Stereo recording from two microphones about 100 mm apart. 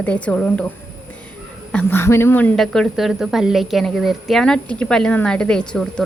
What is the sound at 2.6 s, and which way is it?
A woman's voice, centre (ahead or behind).